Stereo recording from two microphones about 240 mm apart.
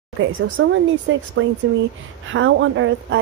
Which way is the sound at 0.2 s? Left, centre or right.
Right.